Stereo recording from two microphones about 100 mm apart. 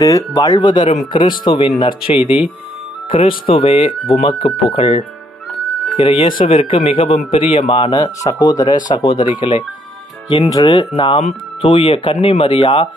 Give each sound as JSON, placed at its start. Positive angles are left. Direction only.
{"t": 0.0, "sound": "speech", "side_deg": 35}
{"t": 2.2, "sound": "speech", "side_deg": -15}
{"t": 3.1, "sound": "speech", "side_deg": 60}
{"t": 8.2, "sound": "speech", "side_deg": 40}
{"t": 10.5, "sound": "speech", "side_deg": 40}
{"t": 11.6, "sound": "speech", "side_deg": 60}